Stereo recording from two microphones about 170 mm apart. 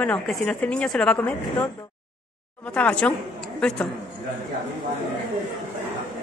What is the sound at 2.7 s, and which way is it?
A woman's voice, 5° left (ahead or behind).